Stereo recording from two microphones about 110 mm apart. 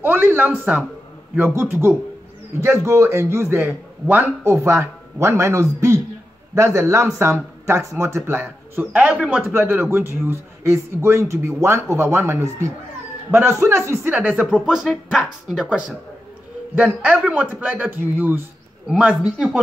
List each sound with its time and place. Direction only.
0.0 s a man's voice: 20° right (ahead or behind)
9.4 s a man's voice: 20° right (ahead or behind)
14.9 s a man's voice: centre (ahead or behind)